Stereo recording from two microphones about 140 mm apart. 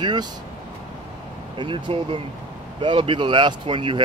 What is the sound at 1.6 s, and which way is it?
Speech, 35° right (ahead or behind).